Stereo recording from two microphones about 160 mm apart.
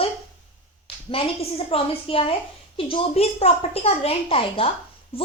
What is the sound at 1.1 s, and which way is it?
A woman's voice, 35° left (ahead or behind).